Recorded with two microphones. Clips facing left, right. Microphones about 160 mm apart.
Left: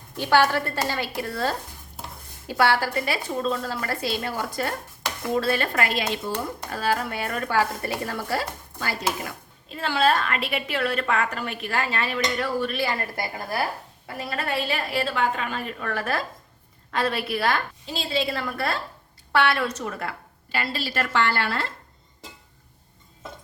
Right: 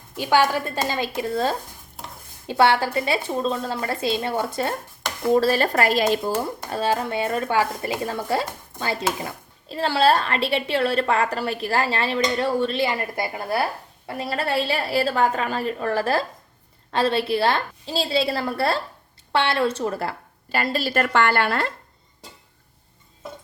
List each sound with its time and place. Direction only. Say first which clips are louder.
0.2 s speech: right 1 dB; 15° right (ahead or behind)
5.3 s a woman's voice: right 5 dB; 35° right (ahead or behind); by 21.7 s 55° right (ahead or behind)